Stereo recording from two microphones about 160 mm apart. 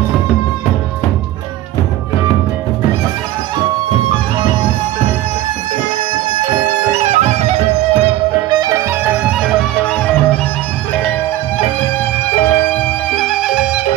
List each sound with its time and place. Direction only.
6.9 s music: 50° right (ahead or behind)
8.5 s music: 25° right (ahead or behind)
13.1 s music: centre (ahead or behind)